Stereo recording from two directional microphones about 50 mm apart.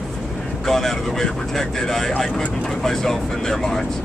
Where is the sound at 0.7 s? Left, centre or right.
Centre.